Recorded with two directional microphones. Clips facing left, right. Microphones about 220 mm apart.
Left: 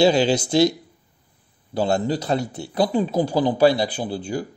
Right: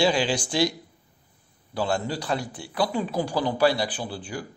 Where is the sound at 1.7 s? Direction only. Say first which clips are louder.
Left 6 dB; 25° left (ahead or behind).